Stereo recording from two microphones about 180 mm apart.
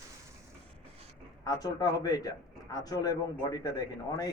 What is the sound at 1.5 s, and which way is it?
A man's voice, 20° left (ahead or behind).